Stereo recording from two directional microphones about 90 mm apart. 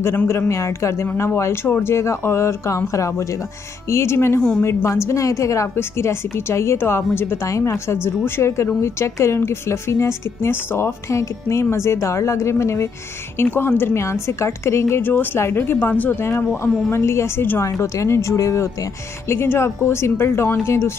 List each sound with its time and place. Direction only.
0.0 s a woman's voice: 25° left (ahead or behind)